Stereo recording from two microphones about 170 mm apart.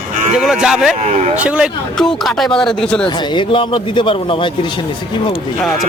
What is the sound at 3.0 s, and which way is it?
Speech, 30° left (ahead or behind).